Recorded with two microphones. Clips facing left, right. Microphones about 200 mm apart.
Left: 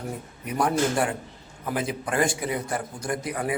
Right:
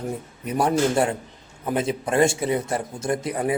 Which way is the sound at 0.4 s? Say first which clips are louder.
Right 3 dB; 25° right (ahead or behind).